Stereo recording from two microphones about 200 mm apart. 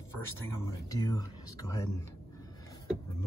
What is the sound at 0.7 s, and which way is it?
Speech, 20° left (ahead or behind).